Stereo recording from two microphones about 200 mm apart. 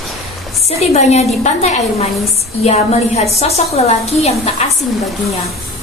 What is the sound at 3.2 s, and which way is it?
A woman's voice, 30° left (ahead or behind).